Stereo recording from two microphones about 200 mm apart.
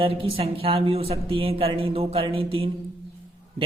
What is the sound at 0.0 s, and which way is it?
A man's voice, 25° right (ahead or behind).